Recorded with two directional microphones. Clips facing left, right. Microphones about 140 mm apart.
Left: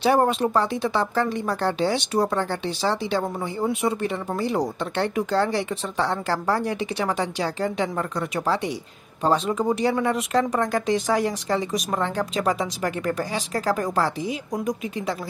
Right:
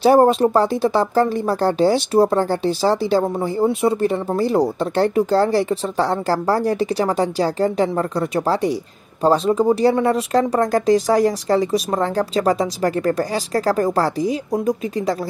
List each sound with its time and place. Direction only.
0.0 s speech: 35° right (ahead or behind)